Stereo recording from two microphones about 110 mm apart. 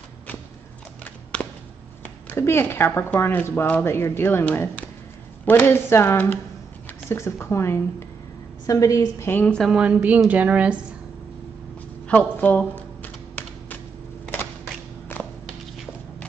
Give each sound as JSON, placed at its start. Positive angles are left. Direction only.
{"t": 1.4, "sound": "a sound", "side_deg": 10}
{"t": 2.2, "sound": "a woman's voice", "side_deg": 20}
{"t": 9.3, "sound": "a woman's voice", "side_deg": 15}
{"t": 9.6, "sound": "a woman's voice", "side_deg": -5}
{"t": 12.1, "sound": "typing", "side_deg": 15}
{"t": 15.1, "sound": "a sound", "side_deg": 20}